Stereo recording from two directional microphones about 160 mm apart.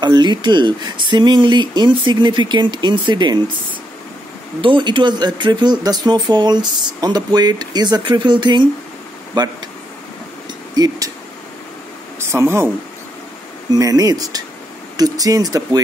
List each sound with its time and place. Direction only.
0.0 s speech: 25° right (ahead or behind)
4.6 s speech: 30° right (ahead or behind)
12.3 s speech: 15° right (ahead or behind)
13.7 s speech: 20° right (ahead or behind)